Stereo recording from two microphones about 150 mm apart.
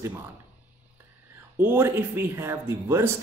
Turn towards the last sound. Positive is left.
turn(degrees=-15)  # may be behind; listen again after turning